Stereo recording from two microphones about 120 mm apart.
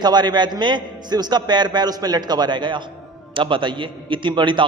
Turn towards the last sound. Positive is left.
turn(degrees=-40)  # may be behind; listen again after turning